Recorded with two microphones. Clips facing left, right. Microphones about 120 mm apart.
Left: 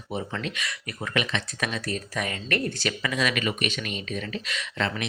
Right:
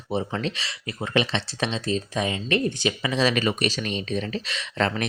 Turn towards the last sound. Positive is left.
turn(degrees=-30)  # may be behind; listen again after turning